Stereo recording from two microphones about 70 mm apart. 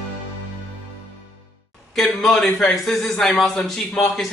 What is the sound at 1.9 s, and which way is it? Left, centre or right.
A man's voice, centre.